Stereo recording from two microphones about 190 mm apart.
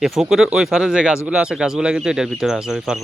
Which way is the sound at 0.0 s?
Centre (ahead or behind).